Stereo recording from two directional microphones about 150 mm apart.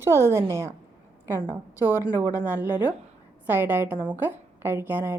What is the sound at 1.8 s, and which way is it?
Speech, 15° right (ahead or behind).